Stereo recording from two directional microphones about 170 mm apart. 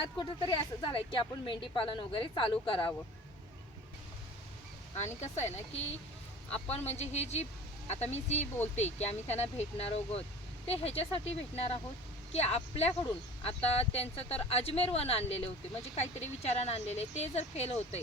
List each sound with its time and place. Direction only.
0.2 s a woman's voice: 30° left (ahead or behind)
4.9 s speech: 40° left (ahead or behind)